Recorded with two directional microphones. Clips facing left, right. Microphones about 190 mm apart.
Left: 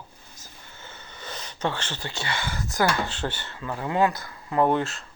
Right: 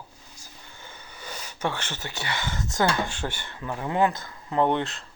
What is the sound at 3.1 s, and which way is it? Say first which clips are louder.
Speech: left 2 dB; 10° right (ahead or behind).